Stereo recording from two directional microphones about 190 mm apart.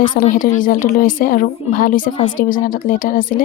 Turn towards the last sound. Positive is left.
turn(degrees=45)  # may be behind; listen again after turning